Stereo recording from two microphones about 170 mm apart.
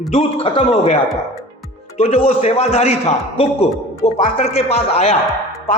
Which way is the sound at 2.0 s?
35° left (ahead or behind).